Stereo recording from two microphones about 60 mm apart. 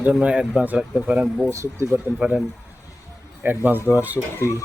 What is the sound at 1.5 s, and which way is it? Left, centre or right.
Speech, right.